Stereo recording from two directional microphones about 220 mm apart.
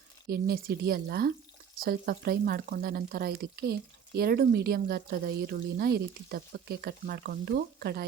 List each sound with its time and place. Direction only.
0.3 s speech: 45° right (ahead or behind)